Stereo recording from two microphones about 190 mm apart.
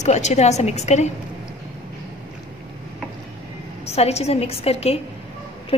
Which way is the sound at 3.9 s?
35° left (ahead or behind).